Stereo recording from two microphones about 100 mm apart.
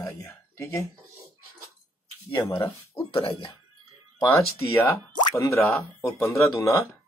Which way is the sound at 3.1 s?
60° left (ahead or behind).